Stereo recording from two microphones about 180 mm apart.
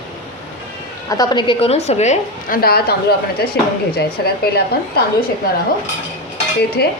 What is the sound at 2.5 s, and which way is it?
Speech, 60° left (ahead or behind).